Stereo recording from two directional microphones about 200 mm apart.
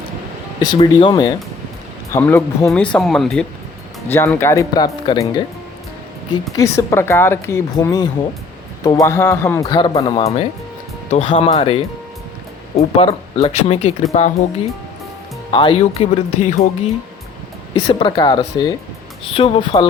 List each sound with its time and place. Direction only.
0.8 s speech: 25° left (ahead or behind)
6.6 s speech: 15° left (ahead or behind); by 14.3 s 35° left (ahead or behind)
15.5 s speech: 25° left (ahead or behind)
17.8 s speech: 25° left (ahead or behind)